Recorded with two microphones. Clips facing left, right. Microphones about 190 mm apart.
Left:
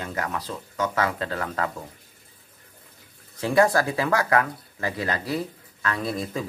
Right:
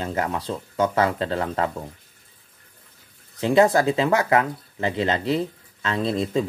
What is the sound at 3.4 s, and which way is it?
Speech, 20° right (ahead or behind).